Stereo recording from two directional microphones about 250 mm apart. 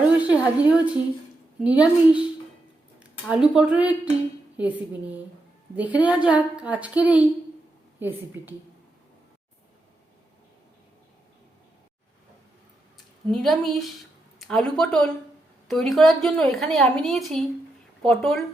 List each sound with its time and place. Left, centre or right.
0.2 s a sound: centre
1.6 s a woman's voice: centre
3.2 s a woman's voice: centre
13.2 s a woman's voice: centre